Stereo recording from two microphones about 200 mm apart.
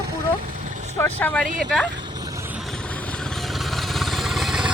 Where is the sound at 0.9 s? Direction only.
10° left (ahead or behind).